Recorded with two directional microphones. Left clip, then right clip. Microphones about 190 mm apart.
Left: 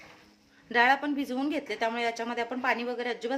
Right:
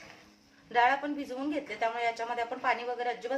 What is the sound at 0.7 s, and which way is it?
Speech, 55° left (ahead or behind).